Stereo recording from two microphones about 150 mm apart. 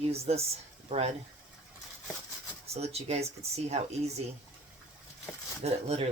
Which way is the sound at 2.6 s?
45° right (ahead or behind).